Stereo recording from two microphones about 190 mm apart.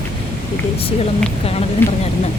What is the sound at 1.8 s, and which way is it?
Speech, 10° left (ahead or behind).